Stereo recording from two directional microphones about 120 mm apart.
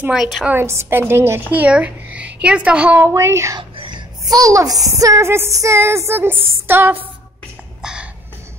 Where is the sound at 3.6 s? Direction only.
45° right (ahead or behind); by 6.9 s 20° right (ahead or behind).